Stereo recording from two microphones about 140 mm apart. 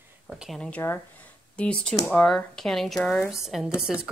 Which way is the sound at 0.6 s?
10° left (ahead or behind).